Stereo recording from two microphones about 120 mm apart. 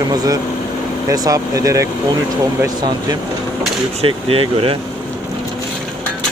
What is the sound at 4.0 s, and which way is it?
Speech, 55° right (ahead or behind).